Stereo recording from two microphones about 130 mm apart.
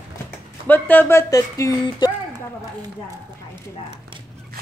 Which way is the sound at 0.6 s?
15° left (ahead or behind).